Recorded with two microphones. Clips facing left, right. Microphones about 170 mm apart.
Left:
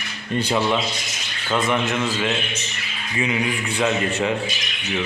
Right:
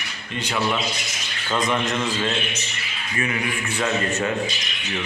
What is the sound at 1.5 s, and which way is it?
Speech, 5° left (ahead or behind).